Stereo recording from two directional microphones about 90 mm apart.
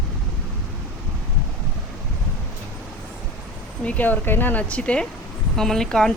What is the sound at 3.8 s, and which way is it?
Speech, 20° left (ahead or behind).